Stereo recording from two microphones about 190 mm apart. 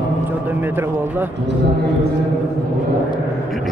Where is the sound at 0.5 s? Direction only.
10° right (ahead or behind).